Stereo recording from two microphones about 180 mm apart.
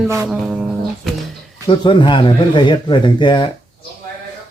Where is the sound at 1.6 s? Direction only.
25° left (ahead or behind).